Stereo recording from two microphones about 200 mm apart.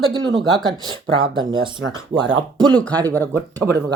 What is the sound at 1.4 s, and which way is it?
Speech, 25° right (ahead or behind).